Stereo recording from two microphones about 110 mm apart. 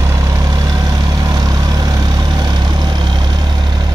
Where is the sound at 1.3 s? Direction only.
35° right (ahead or behind).